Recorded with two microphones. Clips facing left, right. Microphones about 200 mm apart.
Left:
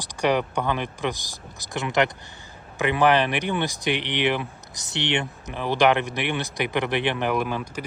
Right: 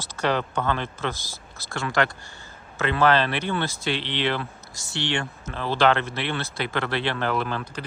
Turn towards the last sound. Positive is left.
turn(degrees=10)  # may be behind; listen again after turning